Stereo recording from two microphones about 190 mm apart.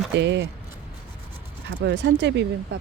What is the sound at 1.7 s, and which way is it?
Speech, 65° right (ahead or behind).